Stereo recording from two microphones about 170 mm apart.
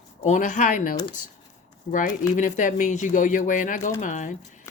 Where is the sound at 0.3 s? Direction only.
50° left (ahead or behind).